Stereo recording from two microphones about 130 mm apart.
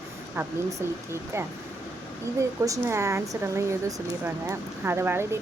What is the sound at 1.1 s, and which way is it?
Speech, 20° right (ahead or behind).